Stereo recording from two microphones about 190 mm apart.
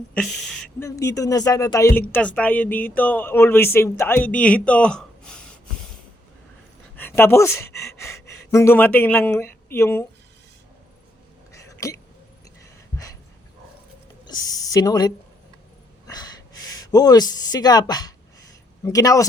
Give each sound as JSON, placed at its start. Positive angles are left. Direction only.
{"t": 0.1, "sound": "speech", "side_deg": 5}
{"t": 0.8, "sound": "speech", "side_deg": 15}
{"t": 6.9, "sound": "speech", "side_deg": 10}
{"t": 11.5, "sound": "a sound", "side_deg": 15}
{"t": 14.3, "sound": "speech", "side_deg": 20}
{"t": 16.0, "sound": "wheeze", "side_deg": 20}
{"t": 16.8, "sound": "speech", "side_deg": 20}